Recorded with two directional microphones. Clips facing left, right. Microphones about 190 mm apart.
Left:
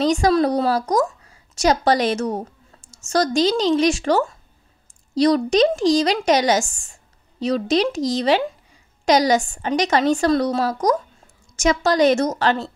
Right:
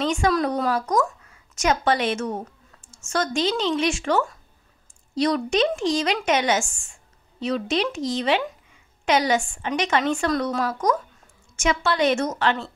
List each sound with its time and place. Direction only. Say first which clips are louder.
0.0 s a woman's voice: left 5 dB; 35° left (ahead or behind)